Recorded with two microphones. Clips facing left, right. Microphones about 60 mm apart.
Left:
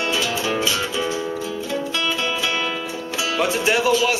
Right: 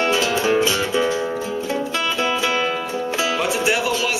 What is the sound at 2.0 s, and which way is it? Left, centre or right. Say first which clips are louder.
Music: right 4 dB; right.